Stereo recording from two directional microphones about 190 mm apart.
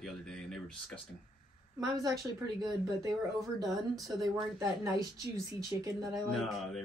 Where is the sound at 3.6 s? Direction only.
Centre (ahead or behind).